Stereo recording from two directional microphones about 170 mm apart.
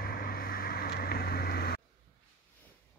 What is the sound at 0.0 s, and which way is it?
Vehicle, 60° left (ahead or behind).